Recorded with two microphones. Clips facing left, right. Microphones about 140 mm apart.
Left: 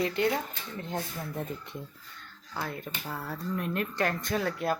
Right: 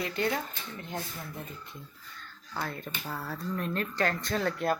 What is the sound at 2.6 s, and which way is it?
Speech, 10° left (ahead or behind).